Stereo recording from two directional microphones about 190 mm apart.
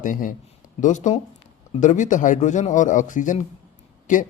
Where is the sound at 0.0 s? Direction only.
45° left (ahead or behind).